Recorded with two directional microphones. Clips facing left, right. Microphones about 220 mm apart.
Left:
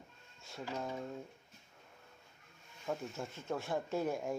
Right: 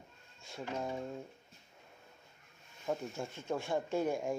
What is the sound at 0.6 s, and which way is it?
Speech, 15° right (ahead or behind).